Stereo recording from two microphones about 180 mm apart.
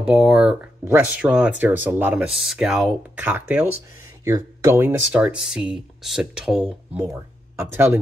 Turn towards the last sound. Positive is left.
turn(degrees=-10)  # may be behind; listen again after turning